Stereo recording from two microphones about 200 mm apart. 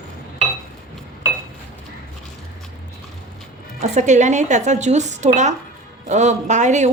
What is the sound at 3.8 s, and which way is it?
A woman's voice, 35° right (ahead or behind).